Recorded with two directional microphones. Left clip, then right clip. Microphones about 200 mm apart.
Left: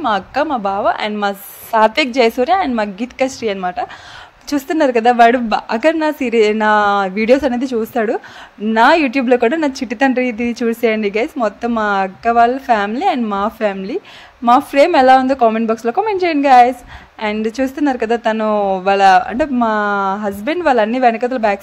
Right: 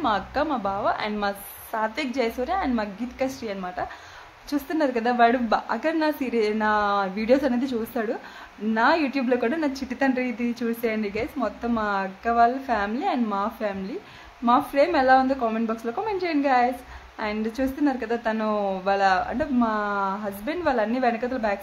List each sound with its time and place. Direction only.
0.0 s a woman's voice: 35° left (ahead or behind)